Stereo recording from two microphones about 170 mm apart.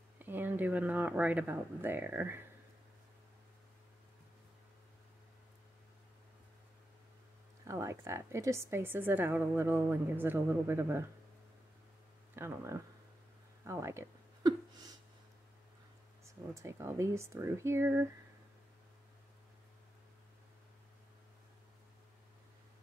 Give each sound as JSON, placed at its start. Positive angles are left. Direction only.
{"t": 0.2, "sound": "a woman's voice", "side_deg": -10}
{"t": 7.6, "sound": "a woman's voice", "side_deg": -15}
{"t": 12.4, "sound": "a woman's voice", "side_deg": -15}
{"t": 13.7, "sound": "a sound", "side_deg": -15}
{"t": 16.3, "sound": "a woman's voice", "side_deg": -15}